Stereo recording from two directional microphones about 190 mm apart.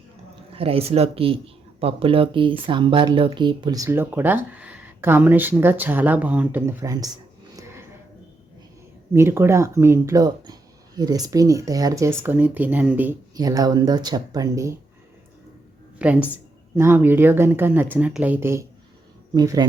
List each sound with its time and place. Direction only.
0.5 s speech: 30° right (ahead or behind)
9.1 s speech: 15° right (ahead or behind)
13.3 s speech: 20° right (ahead or behind)
16.0 s a woman's voice: 5° right (ahead or behind)